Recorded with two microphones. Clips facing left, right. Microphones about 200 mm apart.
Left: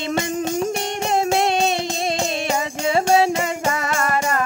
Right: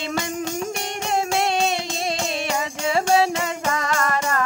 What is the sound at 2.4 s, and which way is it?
Music, 25° left (ahead or behind).